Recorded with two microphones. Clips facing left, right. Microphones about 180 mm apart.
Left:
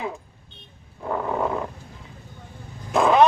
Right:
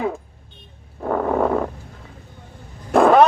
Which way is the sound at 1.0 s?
50° right (ahead or behind).